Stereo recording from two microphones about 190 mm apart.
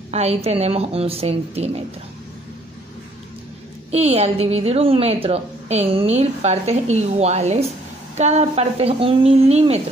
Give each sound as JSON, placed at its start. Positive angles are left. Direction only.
{"t": 0.1, "sound": "a woman's voice", "side_deg": -35}
{"t": 3.9, "sound": "a woman's voice", "side_deg": -35}